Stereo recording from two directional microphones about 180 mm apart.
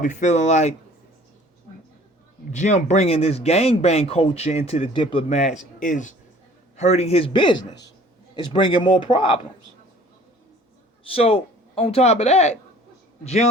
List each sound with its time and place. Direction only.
0.0 s speech: 45° left (ahead or behind)
2.5 s speech: 40° left (ahead or behind)
5.4 s a man's voice: 45° left (ahead or behind); by 9.4 s 25° left (ahead or behind)
11.0 s speech: 30° left (ahead or behind)